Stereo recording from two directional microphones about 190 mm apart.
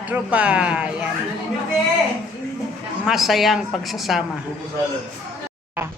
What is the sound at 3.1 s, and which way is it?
A woman's voice, centre (ahead or behind).